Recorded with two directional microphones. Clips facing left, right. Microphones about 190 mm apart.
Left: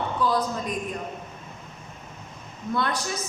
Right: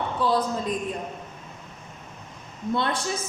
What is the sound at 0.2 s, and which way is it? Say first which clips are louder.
Speech: right 1 dB; 30° right (ahead or behind).